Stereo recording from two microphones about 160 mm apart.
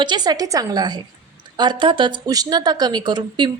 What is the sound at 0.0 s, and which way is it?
A woman's voice, 25° right (ahead or behind).